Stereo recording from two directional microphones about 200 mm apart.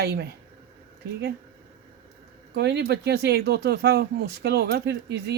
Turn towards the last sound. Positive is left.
turn(degrees=-55)  # may be behind; listen again after turning